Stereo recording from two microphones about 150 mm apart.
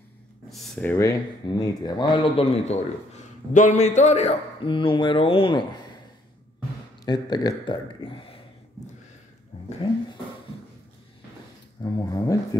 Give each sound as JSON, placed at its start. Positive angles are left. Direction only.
{"t": 0.5, "sound": "speech", "side_deg": 0}
{"t": 0.9, "sound": "speech", "side_deg": 25}
{"t": 7.1, "sound": "speech", "side_deg": 30}
{"t": 11.8, "sound": "speech", "side_deg": 25}